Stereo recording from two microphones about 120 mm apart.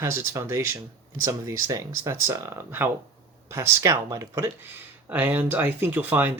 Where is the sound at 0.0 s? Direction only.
25° right (ahead or behind).